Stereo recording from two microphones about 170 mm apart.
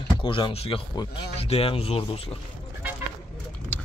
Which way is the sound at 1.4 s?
35° left (ahead or behind).